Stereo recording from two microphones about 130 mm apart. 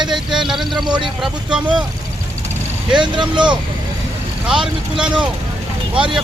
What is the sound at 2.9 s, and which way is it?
Speech, 35° right (ahead or behind).